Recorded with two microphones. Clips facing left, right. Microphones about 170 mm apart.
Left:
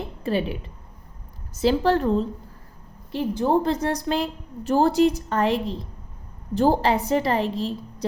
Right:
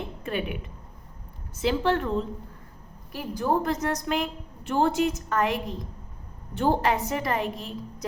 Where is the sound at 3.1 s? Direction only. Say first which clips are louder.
Left 5 dB; 25° left (ahead or behind).